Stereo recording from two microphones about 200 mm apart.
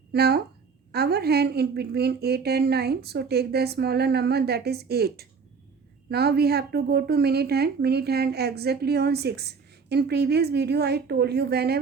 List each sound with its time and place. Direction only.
0.1 s a woman's voice: 55° right (ahead or behind)